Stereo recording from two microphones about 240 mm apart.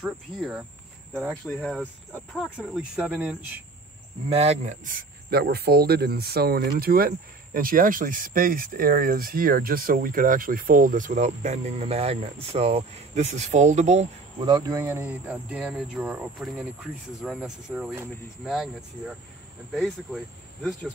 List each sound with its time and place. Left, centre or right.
0.0 s speech: centre
4.3 s speech: right; by 20.2 s centre